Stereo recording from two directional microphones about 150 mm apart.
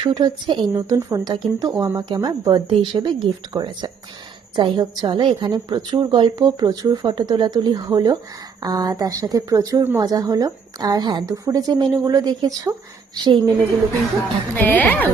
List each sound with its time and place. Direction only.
0.0 s a woman's voice: 25° right (ahead or behind)
14.5 s speech: 10° left (ahead or behind)